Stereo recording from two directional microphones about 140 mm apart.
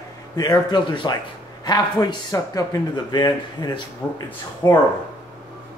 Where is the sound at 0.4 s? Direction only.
30° left (ahead or behind).